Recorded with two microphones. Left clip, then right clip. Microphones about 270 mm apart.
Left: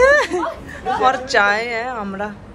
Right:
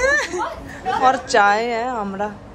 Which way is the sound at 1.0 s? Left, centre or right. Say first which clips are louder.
Right 1 dB; centre.